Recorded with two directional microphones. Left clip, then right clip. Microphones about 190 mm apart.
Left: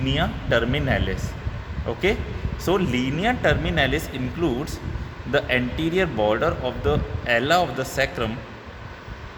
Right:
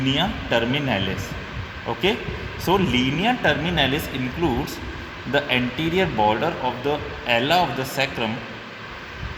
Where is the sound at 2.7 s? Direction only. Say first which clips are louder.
Right 2 dB; 30° left (ahead or behind).